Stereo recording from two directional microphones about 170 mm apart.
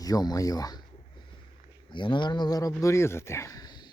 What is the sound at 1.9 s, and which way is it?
Speech, 25° left (ahead or behind).